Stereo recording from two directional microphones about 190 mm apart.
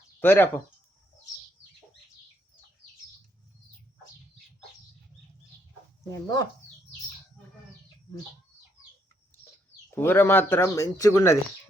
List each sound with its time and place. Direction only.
0.2 s speech: 10° left (ahead or behind)
6.2 s speech: 20° left (ahead or behind)
9.9 s speech: 10° left (ahead or behind)